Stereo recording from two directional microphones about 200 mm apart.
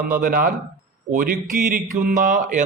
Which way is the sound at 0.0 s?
45° right (ahead or behind).